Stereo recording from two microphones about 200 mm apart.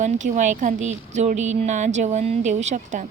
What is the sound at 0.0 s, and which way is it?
A woman's voice, 35° right (ahead or behind).